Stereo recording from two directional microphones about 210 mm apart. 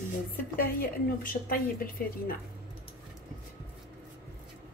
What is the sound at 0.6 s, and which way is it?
Speech, 40° left (ahead or behind).